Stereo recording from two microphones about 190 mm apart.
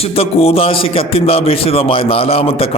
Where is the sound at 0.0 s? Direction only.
30° left (ahead or behind).